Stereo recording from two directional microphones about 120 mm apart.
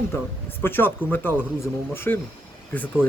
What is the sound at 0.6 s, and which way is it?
Speech, 15° left (ahead or behind).